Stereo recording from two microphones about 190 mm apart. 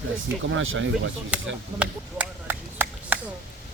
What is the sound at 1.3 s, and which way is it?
Speech, 5° right (ahead or behind).